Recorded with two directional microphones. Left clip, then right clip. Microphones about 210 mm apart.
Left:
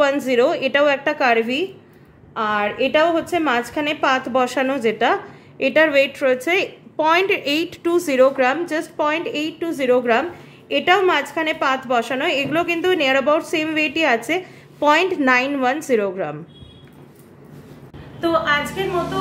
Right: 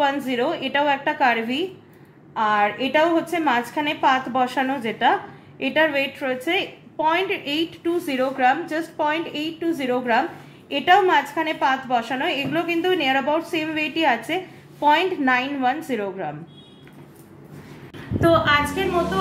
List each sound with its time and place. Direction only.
0.0 s a woman's voice: 40° left (ahead or behind)
18.2 s a woman's voice: 5° left (ahead or behind)